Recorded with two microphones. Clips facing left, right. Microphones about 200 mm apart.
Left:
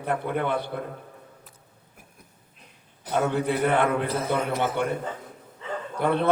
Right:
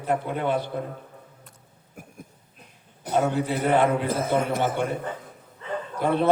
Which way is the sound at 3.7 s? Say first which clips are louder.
Right 5 dB; 55° left (ahead or behind).